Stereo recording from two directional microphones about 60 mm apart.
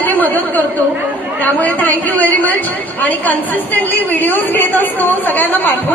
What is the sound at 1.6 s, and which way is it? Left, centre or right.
A woman's voice, left.